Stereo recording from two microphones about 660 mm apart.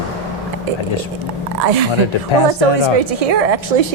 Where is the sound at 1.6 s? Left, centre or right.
Right.